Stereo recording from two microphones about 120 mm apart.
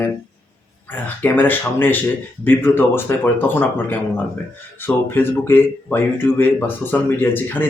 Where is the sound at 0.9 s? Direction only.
15° left (ahead or behind).